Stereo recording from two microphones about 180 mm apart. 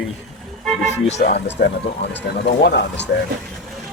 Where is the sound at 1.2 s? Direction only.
65° left (ahead or behind).